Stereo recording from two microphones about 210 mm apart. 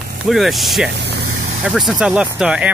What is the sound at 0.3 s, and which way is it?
Speech, centre (ahead or behind).